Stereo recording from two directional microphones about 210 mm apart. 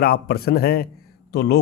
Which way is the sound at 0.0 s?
50° left (ahead or behind).